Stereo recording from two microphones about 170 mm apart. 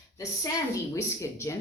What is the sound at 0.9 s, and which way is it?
Speech, 20° left (ahead or behind).